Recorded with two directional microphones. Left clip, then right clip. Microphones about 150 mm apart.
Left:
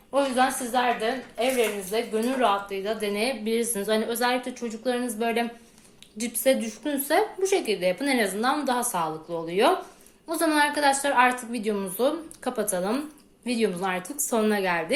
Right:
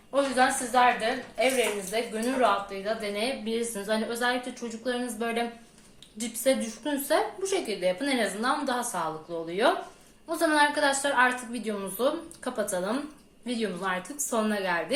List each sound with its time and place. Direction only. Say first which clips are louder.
0.1 s a woman's voice: left 1 dB; 45° left (ahead or behind)